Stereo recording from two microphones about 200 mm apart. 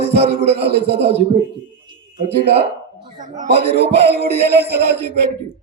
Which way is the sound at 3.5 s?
55° right (ahead or behind).